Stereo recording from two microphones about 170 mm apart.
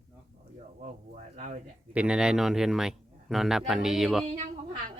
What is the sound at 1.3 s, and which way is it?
Speech, 45° right (ahead or behind).